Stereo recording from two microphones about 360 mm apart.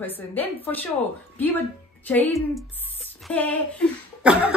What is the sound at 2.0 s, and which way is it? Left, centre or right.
Speech, centre.